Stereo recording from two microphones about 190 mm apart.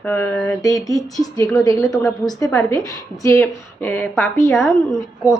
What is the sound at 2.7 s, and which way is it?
A woman's voice, 15° left (ahead or behind).